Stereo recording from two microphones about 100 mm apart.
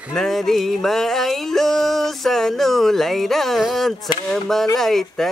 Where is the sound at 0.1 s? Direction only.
5° left (ahead or behind).